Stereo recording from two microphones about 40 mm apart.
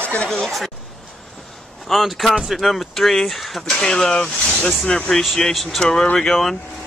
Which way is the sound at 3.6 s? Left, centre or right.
Centre.